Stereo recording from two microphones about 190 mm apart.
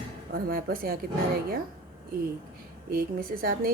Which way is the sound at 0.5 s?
50° right (ahead or behind).